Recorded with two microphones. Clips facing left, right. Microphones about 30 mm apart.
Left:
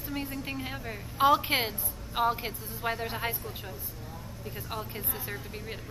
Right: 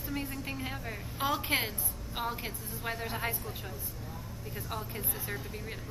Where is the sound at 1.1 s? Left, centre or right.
Left.